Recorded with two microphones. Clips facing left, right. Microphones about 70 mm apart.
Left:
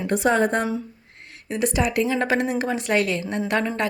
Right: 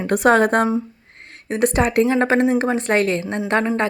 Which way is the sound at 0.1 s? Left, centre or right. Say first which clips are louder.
Right 5 dB; right.